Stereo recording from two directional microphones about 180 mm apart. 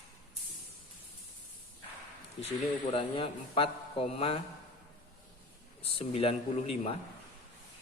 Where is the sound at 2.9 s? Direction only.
30° left (ahead or behind).